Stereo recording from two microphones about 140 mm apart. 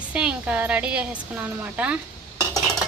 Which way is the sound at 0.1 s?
5° right (ahead or behind).